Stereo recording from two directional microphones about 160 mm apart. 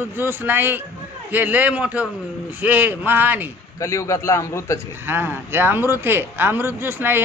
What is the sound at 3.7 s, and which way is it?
A man's voice, 20° left (ahead or behind).